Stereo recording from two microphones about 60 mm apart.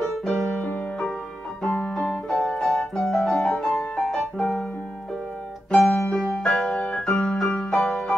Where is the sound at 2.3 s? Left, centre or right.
Centre.